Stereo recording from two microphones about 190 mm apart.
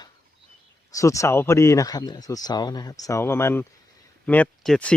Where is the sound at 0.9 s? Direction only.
15° left (ahead or behind).